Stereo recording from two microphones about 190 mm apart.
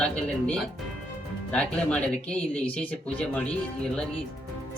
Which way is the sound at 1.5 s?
5° left (ahead or behind).